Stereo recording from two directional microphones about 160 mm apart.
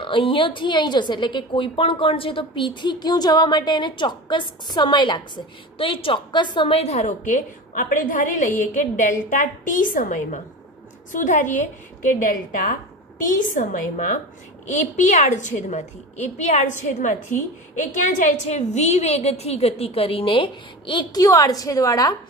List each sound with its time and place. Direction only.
0.0 s a woman's voice: 30° left (ahead or behind)